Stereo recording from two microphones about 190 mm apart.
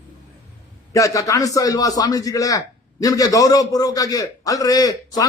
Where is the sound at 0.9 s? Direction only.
15° left (ahead or behind).